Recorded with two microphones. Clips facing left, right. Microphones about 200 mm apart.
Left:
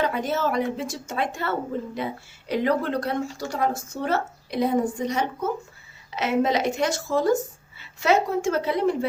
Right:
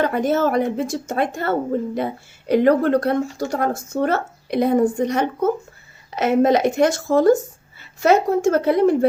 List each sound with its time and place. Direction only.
0.0 s speech: 50° right (ahead or behind)